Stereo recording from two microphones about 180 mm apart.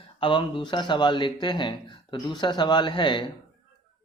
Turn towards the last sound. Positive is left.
turn(degrees=25)  # may be behind; listen again after turning